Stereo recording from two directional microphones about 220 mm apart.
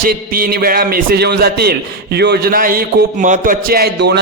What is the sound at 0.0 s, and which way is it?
A man's voice, 40° right (ahead or behind).